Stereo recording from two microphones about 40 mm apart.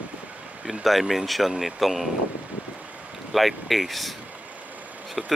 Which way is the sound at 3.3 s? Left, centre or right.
Centre.